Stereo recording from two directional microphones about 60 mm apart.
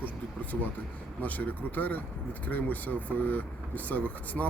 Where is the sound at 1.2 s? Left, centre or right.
Left.